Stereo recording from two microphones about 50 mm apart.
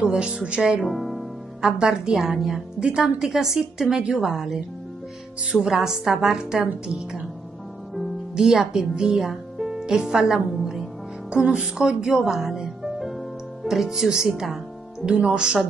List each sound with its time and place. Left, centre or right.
0.1 s a woman's voice: centre
0.8 s music: centre
1.7 s a woman's voice: centre
2.8 s a woman's voice: centre
3.3 s a woman's voice: centre
8.4 s a woman's voice: centre
11.2 s a woman's voice: centre